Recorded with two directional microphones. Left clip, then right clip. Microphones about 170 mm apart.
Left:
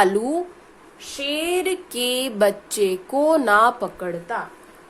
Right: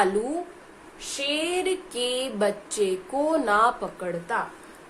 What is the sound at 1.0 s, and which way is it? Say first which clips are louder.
Speech: left 2 dB; 35° left (ahead or behind).